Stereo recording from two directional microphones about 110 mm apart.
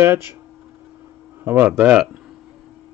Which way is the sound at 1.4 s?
15° right (ahead or behind).